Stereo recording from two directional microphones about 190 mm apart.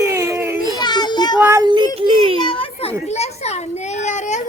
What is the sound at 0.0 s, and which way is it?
Baby cry, 15° right (ahead or behind).